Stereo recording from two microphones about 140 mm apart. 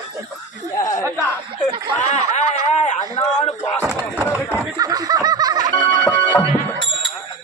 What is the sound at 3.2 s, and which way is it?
Speech, 30° left (ahead or behind).